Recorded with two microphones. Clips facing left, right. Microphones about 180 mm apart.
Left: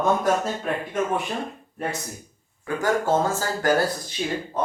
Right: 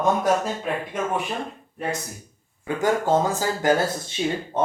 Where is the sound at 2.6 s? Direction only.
20° right (ahead or behind).